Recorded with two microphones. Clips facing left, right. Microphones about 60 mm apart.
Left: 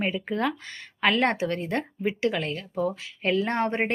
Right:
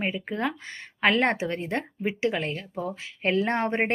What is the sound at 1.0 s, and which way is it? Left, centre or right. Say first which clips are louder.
A woman's voice: even; right.